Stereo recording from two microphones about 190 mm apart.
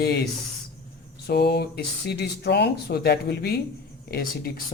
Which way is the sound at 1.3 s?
60° left (ahead or behind).